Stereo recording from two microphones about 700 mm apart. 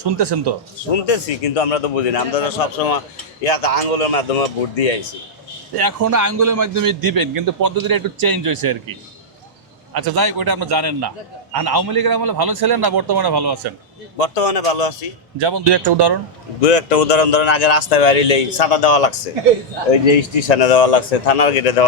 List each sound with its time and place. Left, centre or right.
0.0 s a man's voice: right
1.0 s a man's voice: left
5.7 s a man's voice: right
14.2 s speech: left
15.4 s a man's voice: right
16.6 s speech: left
20.5 s speech: left